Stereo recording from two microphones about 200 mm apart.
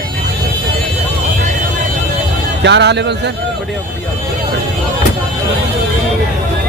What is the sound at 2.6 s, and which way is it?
Speech, 60° right (ahead or behind).